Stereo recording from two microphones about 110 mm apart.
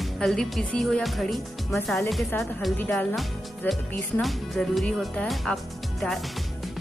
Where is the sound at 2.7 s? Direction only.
15° left (ahead or behind).